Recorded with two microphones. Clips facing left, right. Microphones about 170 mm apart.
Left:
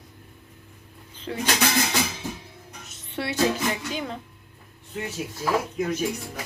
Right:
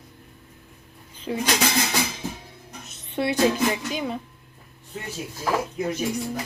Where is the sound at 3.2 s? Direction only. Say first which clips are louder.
Right 5 dB; 20° right (ahead or behind).